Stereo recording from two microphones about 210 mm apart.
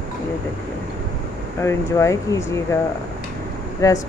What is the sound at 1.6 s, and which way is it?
Speech, 15° left (ahead or behind).